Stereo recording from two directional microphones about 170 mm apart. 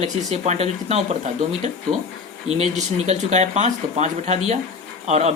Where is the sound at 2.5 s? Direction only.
40° right (ahead or behind).